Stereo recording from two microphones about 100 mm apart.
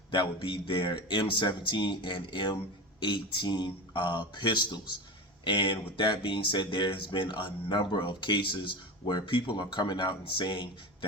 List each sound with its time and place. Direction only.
0.1 s speech: 55° left (ahead or behind)